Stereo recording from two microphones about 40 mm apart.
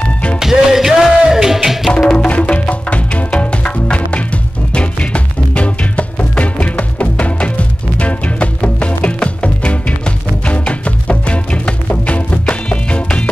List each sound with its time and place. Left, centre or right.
0.4 s music: centre
1.9 s music: centre
2.1 s music: left
3.3 s music: left